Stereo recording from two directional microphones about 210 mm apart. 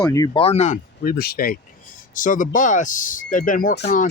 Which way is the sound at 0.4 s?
30° left (ahead or behind).